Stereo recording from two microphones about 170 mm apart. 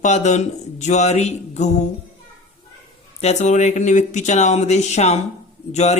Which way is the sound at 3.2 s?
40° left (ahead or behind).